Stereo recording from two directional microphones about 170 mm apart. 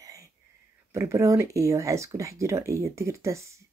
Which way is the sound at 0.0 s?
20° right (ahead or behind).